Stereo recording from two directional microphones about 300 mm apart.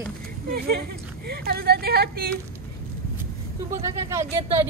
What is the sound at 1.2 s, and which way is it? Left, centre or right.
Speech, right.